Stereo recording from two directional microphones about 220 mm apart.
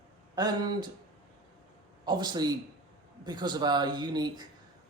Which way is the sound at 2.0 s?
20° right (ahead or behind).